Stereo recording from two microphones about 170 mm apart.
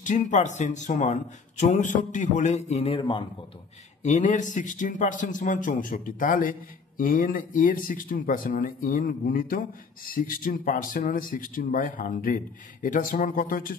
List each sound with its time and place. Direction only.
0.0 s speech: 45° left (ahead or behind); by 3.3 s 30° left (ahead or behind)
4.0 s speech: 45° left (ahead or behind)